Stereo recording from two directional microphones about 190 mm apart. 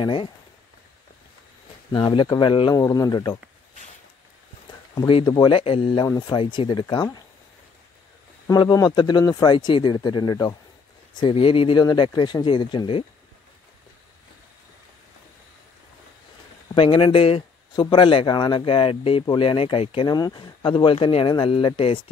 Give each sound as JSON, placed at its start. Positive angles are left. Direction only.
{"t": 0.0, "sound": "speech", "side_deg": 25}
{"t": 1.9, "sound": "speech", "side_deg": 20}
{"t": 4.9, "sound": "speech", "side_deg": 25}
{"t": 8.5, "sound": "speech", "side_deg": 20}
{"t": 16.7, "sound": "speech", "side_deg": 25}